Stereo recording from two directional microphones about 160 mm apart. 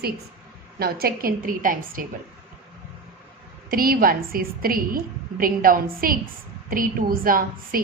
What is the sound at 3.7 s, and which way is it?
A woman's voice, 65° right (ahead or behind).